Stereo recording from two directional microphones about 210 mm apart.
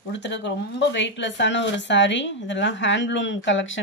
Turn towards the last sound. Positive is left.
turn(degrees=65)  # may be behind; listen again after turning